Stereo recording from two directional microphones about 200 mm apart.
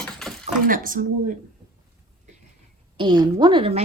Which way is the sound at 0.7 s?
45° right (ahead or behind).